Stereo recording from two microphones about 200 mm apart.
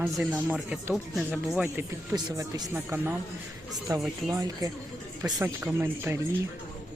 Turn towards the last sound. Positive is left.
turn(degrees=-10)  # may be behind; listen again after turning